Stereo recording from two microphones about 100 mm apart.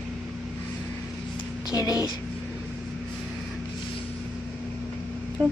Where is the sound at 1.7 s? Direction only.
40° left (ahead or behind).